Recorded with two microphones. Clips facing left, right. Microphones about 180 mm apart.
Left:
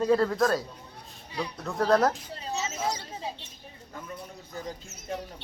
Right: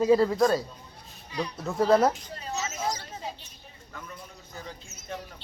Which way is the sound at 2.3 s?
30° left (ahead or behind).